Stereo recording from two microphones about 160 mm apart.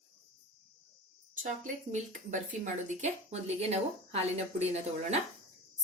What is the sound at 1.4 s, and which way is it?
Speech, 50° right (ahead or behind).